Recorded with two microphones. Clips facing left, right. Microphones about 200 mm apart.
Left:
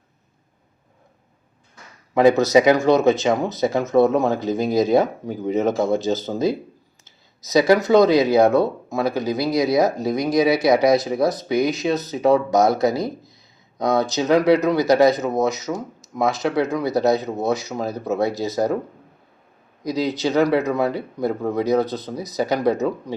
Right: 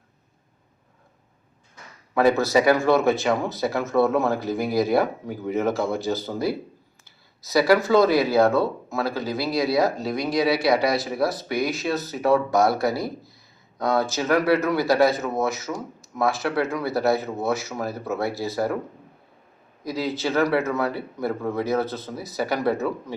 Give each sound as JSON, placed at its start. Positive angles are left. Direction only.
{"t": 2.4, "sound": "speech", "side_deg": 20}
{"t": 19.8, "sound": "speech", "side_deg": 20}